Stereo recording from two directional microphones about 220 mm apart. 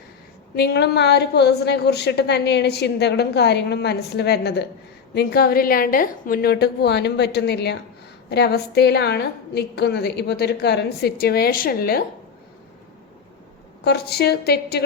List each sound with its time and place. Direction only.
0.5 s a woman's voice: 45° left (ahead or behind)
13.8 s a woman's voice: 50° left (ahead or behind)